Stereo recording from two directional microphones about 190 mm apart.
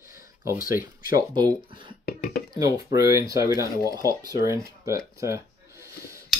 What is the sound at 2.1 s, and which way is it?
Speech, 55° left (ahead or behind).